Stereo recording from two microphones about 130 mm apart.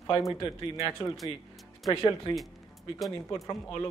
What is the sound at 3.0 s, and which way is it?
Speech, centre (ahead or behind).